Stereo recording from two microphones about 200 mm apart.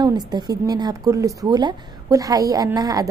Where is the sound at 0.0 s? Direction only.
20° right (ahead or behind).